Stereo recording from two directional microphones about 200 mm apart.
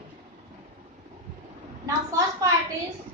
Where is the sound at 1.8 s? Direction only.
15° right (ahead or behind).